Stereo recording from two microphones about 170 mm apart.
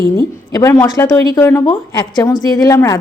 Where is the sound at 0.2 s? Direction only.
15° left (ahead or behind).